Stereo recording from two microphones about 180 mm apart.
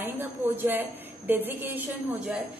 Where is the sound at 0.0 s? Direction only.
10° right (ahead or behind).